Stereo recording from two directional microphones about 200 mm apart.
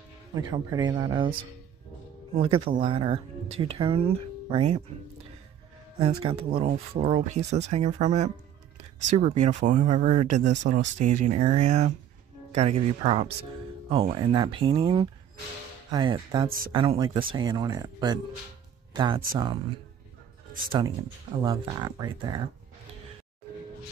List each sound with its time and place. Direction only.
0.3 s speech: 20° right (ahead or behind)
2.3 s speech: 30° right (ahead or behind)
5.9 s speech: 25° right (ahead or behind)
16.4 s speech: 45° right (ahead or behind)
16.7 s speech: 25° right (ahead or behind)
21.5 s speech: 20° right (ahead or behind)